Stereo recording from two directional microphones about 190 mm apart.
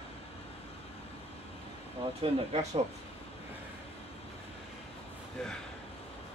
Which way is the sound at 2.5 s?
35° right (ahead or behind).